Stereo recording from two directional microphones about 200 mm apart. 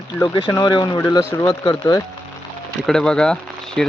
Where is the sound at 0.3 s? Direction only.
20° left (ahead or behind).